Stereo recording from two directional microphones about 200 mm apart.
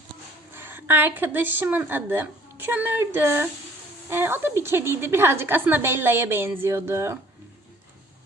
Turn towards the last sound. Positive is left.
turn(degrees=-10)  # may be behind; listen again after turning